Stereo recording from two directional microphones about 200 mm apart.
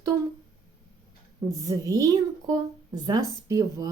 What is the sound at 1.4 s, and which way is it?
A woman's voice, 15° right (ahead or behind).